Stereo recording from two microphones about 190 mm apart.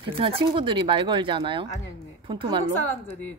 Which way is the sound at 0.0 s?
25° right (ahead or behind).